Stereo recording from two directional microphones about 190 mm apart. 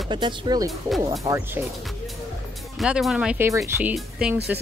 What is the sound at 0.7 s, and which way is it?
Speech, centre (ahead or behind).